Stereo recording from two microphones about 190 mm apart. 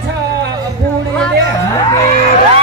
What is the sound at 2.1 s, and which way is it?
Music, 35° left (ahead or behind).